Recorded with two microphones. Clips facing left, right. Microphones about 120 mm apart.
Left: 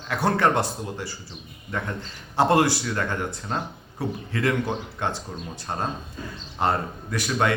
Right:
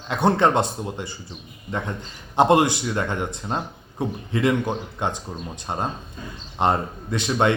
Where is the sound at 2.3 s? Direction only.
20° right (ahead or behind).